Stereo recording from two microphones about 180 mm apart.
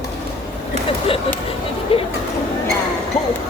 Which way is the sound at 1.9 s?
30° left (ahead or behind).